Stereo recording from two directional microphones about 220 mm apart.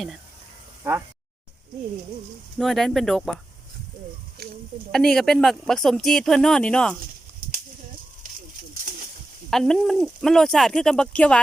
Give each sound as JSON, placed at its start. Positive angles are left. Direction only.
{"t": 2.6, "sound": "speech", "side_deg": 0}
{"t": 4.4, "sound": "a sound", "side_deg": -45}
{"t": 4.9, "sound": "speech", "side_deg": 0}
{"t": 9.5, "sound": "speech", "side_deg": 0}